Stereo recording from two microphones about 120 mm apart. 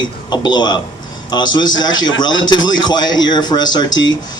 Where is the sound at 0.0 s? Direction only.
35° left (ahead or behind).